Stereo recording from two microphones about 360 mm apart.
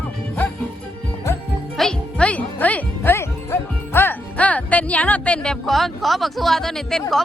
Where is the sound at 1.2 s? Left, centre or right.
Centre.